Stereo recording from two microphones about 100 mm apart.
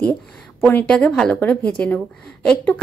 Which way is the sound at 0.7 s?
15° left (ahead or behind).